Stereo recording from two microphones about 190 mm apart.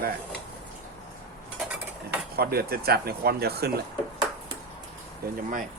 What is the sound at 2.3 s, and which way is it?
Speech, 55° right (ahead or behind).